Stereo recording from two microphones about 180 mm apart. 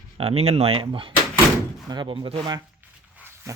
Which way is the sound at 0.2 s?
35° right (ahead or behind).